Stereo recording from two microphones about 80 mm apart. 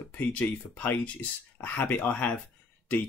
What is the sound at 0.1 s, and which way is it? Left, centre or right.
Speech, left.